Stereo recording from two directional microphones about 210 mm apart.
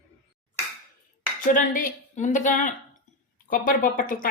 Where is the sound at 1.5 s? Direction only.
40° left (ahead or behind).